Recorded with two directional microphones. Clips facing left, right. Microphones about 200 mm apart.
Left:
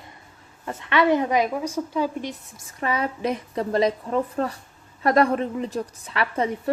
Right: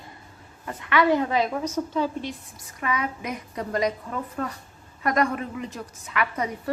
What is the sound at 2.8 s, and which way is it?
A woman's voice, 30° left (ahead or behind).